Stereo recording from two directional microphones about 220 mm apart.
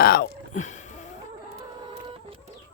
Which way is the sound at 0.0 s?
45° left (ahead or behind).